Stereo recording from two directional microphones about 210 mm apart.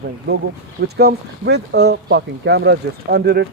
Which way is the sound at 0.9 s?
50° right (ahead or behind).